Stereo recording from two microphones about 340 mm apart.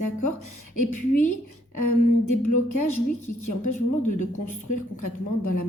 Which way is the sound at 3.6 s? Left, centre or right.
Left.